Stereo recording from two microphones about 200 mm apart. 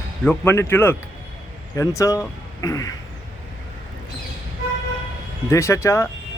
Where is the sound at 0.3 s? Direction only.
10° left (ahead or behind).